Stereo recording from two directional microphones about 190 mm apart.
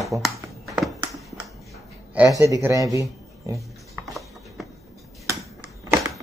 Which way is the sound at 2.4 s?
15° right (ahead or behind).